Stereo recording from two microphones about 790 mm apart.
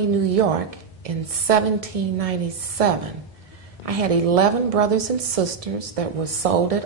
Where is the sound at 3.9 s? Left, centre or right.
Right.